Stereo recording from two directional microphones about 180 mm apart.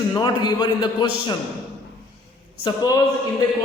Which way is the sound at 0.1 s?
25° left (ahead or behind).